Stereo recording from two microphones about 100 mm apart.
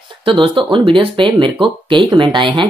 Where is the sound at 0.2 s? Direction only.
55° right (ahead or behind).